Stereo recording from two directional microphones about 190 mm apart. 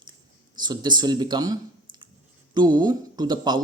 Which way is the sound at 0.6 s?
20° right (ahead or behind).